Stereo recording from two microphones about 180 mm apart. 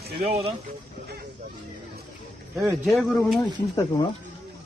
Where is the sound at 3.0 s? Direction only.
5° left (ahead or behind).